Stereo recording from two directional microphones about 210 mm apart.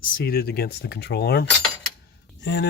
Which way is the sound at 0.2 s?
45° left (ahead or behind).